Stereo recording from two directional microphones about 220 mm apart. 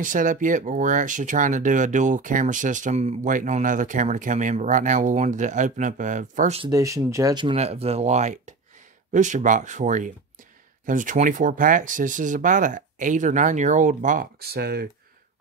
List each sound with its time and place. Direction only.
0.0 s speech: 35° right (ahead or behind)
6.7 s speech: 15° right (ahead or behind); by 14.9 s 45° right (ahead or behind)